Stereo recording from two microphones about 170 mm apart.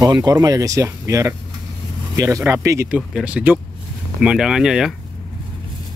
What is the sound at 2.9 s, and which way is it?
Speech, 5° right (ahead or behind).